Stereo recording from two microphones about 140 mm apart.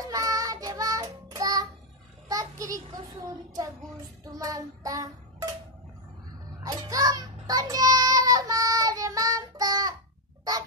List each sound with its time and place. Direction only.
0.0 s child singing: 25° right (ahead or behind)
2.2 s a sound: 25° right (ahead or behind)
4.3 s child singing: 25° right (ahead or behind)
6.6 s child singing: 25° right (ahead or behind)